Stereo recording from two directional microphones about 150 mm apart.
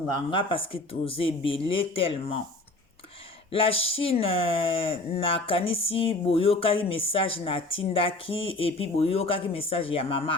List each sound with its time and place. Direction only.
0.1 s speech: 35° left (ahead or behind)
3.5 s speech: 40° left (ahead or behind)